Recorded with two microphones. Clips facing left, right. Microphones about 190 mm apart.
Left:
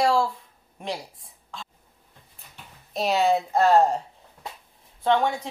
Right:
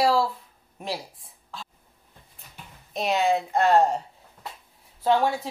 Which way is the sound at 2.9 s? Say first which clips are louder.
Left 1 dB; centre (ahead or behind).